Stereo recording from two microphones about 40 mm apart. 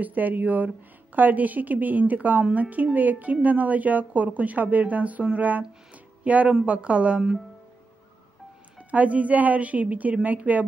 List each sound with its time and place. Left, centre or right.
0.0 s a woman's voice: right
6.2 s a woman's voice: right
8.7 s a woman's voice: right